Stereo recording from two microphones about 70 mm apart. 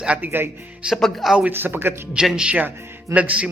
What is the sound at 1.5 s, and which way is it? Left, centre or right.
Speech, right.